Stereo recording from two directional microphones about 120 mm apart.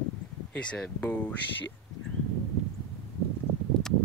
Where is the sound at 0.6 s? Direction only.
10° left (ahead or behind).